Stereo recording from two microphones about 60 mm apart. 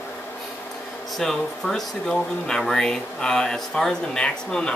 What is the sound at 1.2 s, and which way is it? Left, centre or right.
Speech, centre.